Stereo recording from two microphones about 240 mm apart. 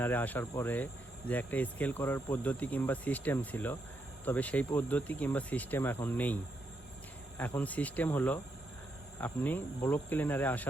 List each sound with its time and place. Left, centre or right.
0.0 s speech: centre